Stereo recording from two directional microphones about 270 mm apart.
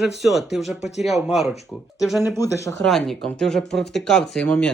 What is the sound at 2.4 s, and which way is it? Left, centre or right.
Speech, centre.